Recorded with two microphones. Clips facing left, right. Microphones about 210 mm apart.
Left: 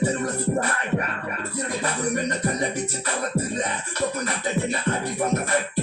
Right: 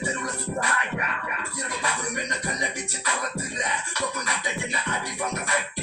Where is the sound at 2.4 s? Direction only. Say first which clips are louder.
Left 7 dB; 35° left (ahead or behind).